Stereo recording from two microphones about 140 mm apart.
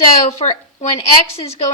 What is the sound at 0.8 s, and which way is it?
Speech, 50° left (ahead or behind).